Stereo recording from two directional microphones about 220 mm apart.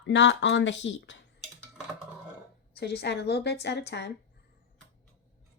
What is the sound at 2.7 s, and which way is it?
Speech, 50° left (ahead or behind).